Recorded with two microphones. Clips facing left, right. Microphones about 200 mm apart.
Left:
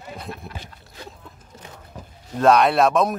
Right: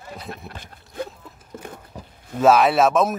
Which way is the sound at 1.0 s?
55° right (ahead or behind).